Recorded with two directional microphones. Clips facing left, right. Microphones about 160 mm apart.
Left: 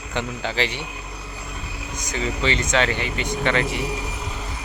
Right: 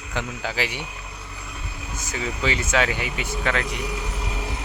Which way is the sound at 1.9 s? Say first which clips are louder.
Left 3 dB; 5° right (ahead or behind).